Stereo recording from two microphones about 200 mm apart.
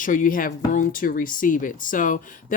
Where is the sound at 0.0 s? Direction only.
40° left (ahead or behind).